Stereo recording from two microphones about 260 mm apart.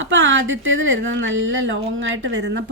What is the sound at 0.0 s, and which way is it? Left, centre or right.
A woman's voice, right.